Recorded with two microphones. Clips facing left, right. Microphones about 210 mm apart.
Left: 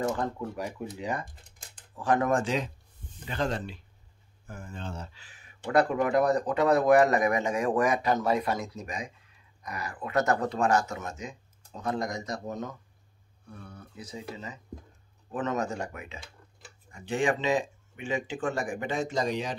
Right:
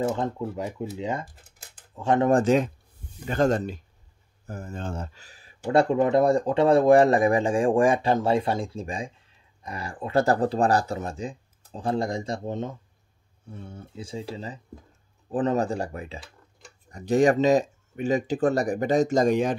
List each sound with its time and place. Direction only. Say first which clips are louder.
0.1 s speech: right 3 dB; 25° right (ahead or behind)
1.2 s cutlery: right 2 dB; 5° right (ahead or behind)
2.0 s speech: right 5 dB; 25° right (ahead or behind)
2.4 s speech: right 9 dB; 50° right (ahead or behind)
16.2 s tick-tock: right 3 dB; centre (ahead or behind)
16.9 s speech: right 8 dB; 40° right (ahead or behind)